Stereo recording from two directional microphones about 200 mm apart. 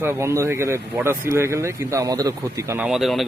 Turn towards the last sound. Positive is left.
turn(degrees=0)  # may be behind; listen again after turning